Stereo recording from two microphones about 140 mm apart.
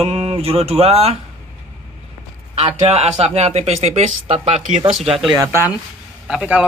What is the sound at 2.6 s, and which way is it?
Speech, 45° right (ahead or behind).